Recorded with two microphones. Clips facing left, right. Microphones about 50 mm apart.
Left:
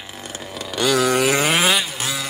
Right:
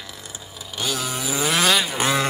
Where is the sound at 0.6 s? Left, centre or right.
Left.